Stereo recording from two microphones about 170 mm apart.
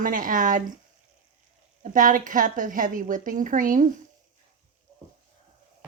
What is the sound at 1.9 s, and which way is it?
A woman's voice, 50° right (ahead or behind).